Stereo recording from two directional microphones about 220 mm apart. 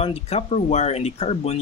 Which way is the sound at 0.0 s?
25° left (ahead or behind).